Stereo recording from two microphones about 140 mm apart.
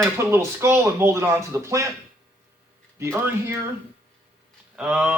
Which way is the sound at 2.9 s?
15° right (ahead or behind).